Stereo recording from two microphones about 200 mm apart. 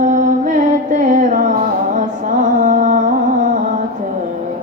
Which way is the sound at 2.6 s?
40° right (ahead or behind).